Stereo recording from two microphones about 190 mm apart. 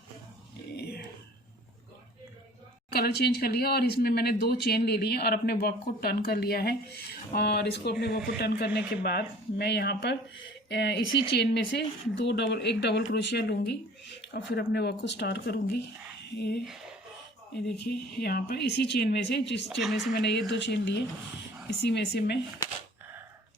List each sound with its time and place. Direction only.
0.8 s a sound: 55° left (ahead or behind)
2.9 s speech: 55° left (ahead or behind)
16.6 s speech: centre (ahead or behind)
17.7 s speech: 55° left (ahead or behind)
19.8 s speech: centre (ahead or behind)
20.1 s speech: 60° left (ahead or behind)